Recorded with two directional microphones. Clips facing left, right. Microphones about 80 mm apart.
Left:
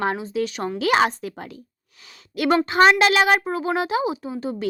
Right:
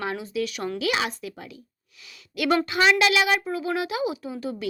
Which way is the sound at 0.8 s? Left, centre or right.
Left.